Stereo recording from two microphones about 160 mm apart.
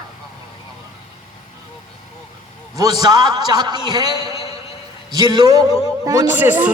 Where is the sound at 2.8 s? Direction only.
25° right (ahead or behind).